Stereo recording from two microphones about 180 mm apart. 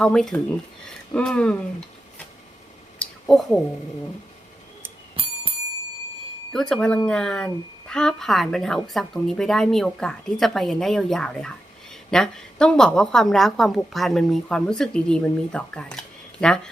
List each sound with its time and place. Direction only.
0.0 s speech: 5° left (ahead or behind)
3.0 s a sound: 5° left (ahead or behind)
5.2 s bicycle bell: 30° right (ahead or behind)
6.5 s speech: 5° left (ahead or behind)